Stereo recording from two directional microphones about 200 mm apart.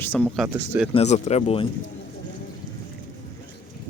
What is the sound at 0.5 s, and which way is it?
Speech, 10° right (ahead or behind).